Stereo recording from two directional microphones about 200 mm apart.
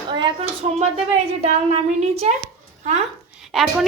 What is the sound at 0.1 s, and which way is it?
A woman's voice, 20° right (ahead or behind).